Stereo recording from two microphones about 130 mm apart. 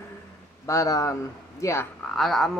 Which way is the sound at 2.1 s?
Centre (ahead or behind).